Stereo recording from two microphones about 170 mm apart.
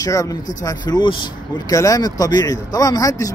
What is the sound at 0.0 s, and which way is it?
Speech, 20° left (ahead or behind).